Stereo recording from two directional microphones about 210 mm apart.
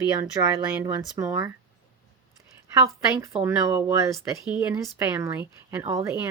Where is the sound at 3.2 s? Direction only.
15° right (ahead or behind).